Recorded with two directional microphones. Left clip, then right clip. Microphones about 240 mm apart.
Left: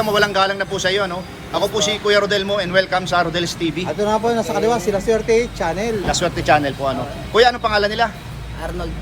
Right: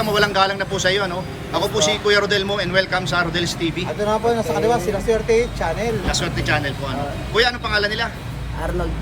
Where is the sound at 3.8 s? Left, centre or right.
Left.